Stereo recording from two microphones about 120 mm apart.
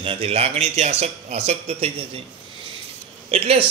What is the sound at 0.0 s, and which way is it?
Speech, 55° right (ahead or behind).